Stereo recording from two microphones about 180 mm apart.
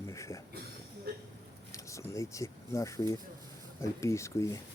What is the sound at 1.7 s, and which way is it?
Speech, 15° left (ahead or behind).